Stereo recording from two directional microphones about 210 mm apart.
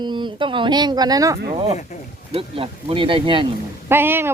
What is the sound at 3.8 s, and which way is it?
Speech, 10° right (ahead or behind).